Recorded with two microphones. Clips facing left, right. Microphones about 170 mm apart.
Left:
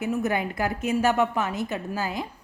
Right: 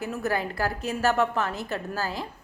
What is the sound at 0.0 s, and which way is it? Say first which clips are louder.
A woman's voice: left 3 dB; 20° left (ahead or behind).